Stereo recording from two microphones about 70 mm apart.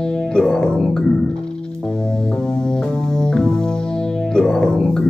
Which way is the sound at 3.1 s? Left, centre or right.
Centre.